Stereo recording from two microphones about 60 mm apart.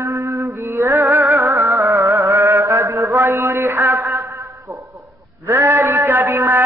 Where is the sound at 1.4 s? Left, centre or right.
Right.